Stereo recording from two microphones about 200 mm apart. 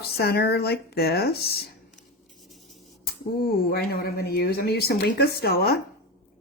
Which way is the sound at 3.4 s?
50° left (ahead or behind).